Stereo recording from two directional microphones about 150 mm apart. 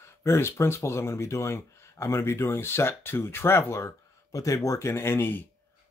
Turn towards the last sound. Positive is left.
turn(degrees=15)  # may be behind; listen again after turning